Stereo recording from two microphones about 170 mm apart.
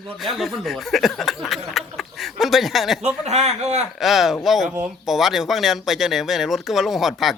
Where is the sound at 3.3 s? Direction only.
40° right (ahead or behind).